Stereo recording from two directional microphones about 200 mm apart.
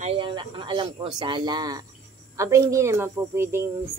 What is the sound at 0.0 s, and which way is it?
A woman's voice, 25° right (ahead or behind).